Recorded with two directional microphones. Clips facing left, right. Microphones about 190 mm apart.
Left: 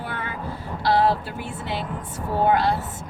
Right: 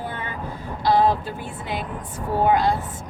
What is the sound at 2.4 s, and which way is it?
Speech, 15° right (ahead or behind).